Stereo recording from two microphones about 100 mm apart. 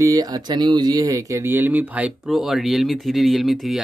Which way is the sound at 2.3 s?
Centre (ahead or behind).